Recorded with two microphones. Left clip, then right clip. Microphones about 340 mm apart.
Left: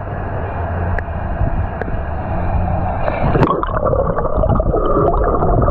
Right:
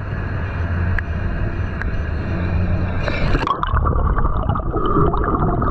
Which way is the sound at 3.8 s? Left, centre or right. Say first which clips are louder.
Left 7 dB; right.